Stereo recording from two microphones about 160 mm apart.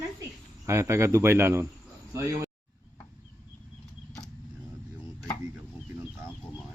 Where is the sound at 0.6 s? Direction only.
20° right (ahead or behind).